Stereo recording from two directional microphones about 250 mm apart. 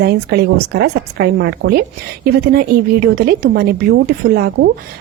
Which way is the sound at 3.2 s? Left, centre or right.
Right.